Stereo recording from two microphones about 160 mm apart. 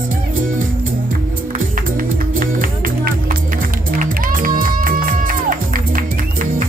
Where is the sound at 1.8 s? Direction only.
60° right (ahead or behind).